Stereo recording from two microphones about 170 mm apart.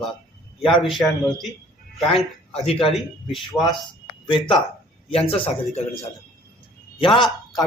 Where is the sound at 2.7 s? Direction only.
35° left (ahead or behind).